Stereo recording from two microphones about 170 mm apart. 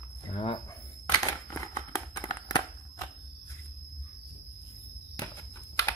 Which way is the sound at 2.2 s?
20° left (ahead or behind).